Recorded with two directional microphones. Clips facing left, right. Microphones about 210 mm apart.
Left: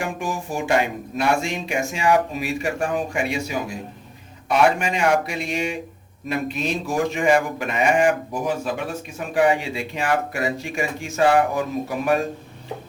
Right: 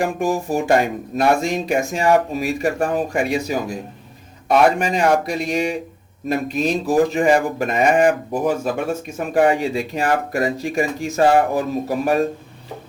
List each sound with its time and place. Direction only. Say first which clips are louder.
0.0 s speech: right 7 dB; 40° right (ahead or behind)